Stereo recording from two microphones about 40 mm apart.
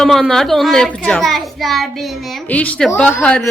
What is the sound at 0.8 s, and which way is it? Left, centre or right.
Speech, left.